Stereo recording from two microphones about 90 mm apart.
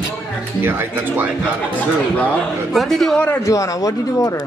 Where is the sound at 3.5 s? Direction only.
40° left (ahead or behind).